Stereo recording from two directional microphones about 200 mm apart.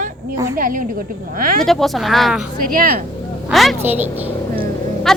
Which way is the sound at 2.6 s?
45° right (ahead or behind).